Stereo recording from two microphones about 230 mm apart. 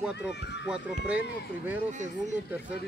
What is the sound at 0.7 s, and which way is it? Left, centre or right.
Speech, centre.